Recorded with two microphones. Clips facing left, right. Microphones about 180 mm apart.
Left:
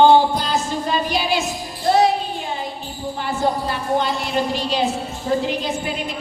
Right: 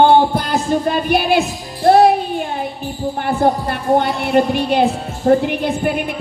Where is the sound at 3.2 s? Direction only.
55° right (ahead or behind).